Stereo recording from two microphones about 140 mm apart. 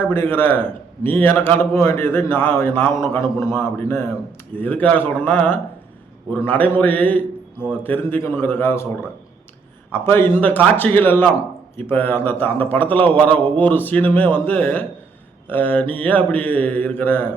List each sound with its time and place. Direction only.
0.0 s a man's voice: 15° left (ahead or behind)
9.9 s a man's voice: 15° left (ahead or behind)